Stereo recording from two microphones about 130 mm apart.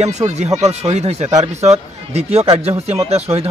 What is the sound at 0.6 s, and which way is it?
Speech, 60° right (ahead or behind).